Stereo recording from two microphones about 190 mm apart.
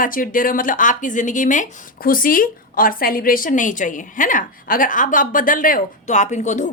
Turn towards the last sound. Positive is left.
turn(degrees=40)  # may be behind; listen again after turning